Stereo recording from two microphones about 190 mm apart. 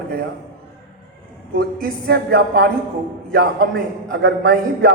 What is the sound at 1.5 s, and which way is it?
Speech, 55° right (ahead or behind).